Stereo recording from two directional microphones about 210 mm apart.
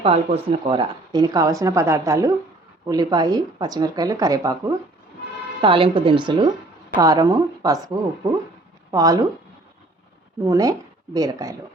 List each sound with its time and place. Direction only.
0.0 s a woman's voice: 30° right (ahead or behind)
8.9 s speech: 15° right (ahead or behind)
10.4 s speech: 15° right (ahead or behind)